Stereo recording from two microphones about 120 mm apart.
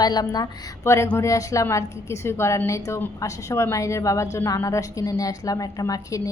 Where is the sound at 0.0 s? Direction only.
35° left (ahead or behind).